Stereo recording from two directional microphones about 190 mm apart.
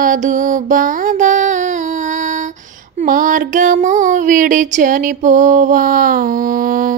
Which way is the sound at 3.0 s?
45° right (ahead or behind).